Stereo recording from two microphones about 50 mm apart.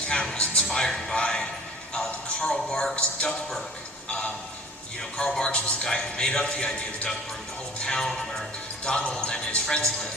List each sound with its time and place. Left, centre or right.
0.1 s speech: centre
1.9 s music: centre
2.9 s speech: left
5.1 s speech: centre